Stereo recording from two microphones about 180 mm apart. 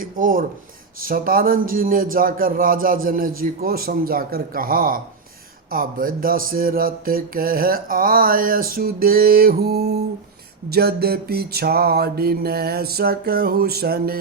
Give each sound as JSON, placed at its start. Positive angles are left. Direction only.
{"t": 0.0, "sound": "speech", "side_deg": -50}
{"t": 1.0, "sound": "mantra", "side_deg": -55}
{"t": 10.7, "sound": "music", "side_deg": -60}